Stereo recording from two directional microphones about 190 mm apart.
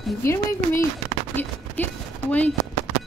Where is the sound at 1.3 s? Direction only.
10° left (ahead or behind).